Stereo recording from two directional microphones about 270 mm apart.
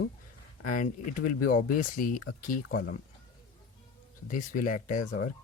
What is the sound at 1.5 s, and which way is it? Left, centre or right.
Speech, left.